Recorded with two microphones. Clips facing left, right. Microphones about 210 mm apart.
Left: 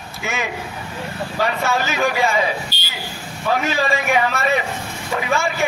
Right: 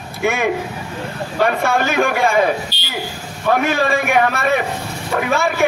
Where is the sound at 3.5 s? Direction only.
55° right (ahead or behind).